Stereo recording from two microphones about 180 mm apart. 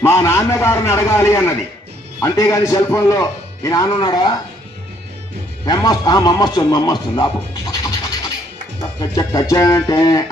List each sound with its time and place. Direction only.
0.0 s a man's voice: 15° left (ahead or behind)
5.6 s a man's voice: 20° left (ahead or behind)